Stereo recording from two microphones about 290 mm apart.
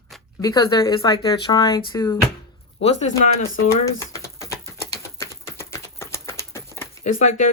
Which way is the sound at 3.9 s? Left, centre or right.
Centre.